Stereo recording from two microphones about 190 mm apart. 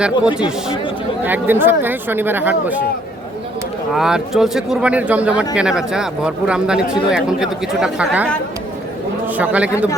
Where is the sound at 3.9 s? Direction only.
5° right (ahead or behind).